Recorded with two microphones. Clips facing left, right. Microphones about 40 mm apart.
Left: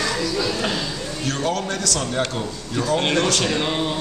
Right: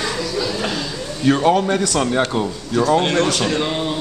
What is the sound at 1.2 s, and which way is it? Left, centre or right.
Speech, centre.